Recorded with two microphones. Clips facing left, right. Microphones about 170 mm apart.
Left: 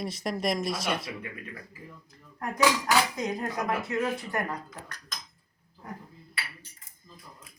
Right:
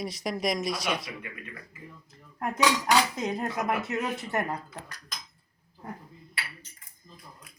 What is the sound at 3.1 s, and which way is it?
Speech, 25° right (ahead or behind).